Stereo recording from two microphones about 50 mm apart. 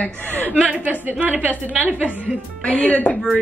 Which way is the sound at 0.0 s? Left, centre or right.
Left.